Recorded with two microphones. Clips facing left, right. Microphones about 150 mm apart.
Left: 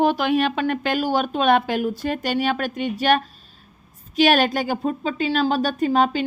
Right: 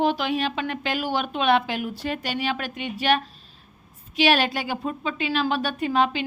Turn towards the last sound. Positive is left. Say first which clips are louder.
# left 4 dB
turn(degrees=40)  # may be behind; listen again after turning